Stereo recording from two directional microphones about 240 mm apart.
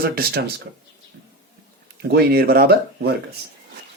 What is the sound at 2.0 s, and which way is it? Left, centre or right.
Speech, right.